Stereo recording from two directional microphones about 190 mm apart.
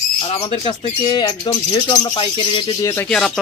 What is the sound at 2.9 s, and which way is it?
Speech, 10° left (ahead or behind).